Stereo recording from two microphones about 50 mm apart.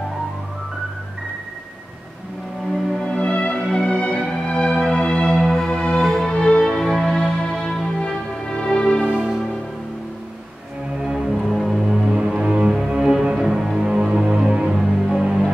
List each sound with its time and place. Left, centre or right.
3.1 s music: left
5.3 s music: centre
6.6 s music: centre
11.0 s music: centre
11.2 s music: centre